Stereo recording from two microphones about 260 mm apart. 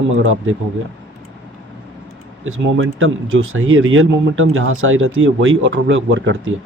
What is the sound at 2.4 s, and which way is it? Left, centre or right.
Speech, right.